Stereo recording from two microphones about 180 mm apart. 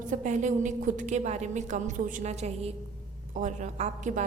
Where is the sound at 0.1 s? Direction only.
45° right (ahead or behind).